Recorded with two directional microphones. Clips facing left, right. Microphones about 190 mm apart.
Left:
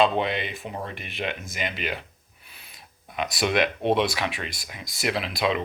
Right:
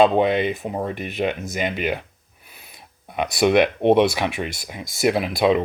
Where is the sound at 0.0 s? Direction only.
50° right (ahead or behind).